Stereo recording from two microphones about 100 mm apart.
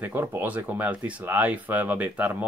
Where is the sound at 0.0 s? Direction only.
25° right (ahead or behind).